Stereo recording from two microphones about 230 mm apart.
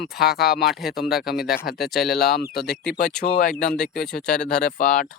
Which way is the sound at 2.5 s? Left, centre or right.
Left.